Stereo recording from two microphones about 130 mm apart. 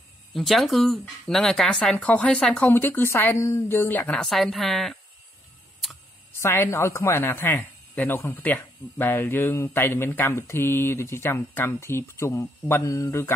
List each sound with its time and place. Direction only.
0.3 s speech: centre (ahead or behind)
6.4 s speech: 20° left (ahead or behind)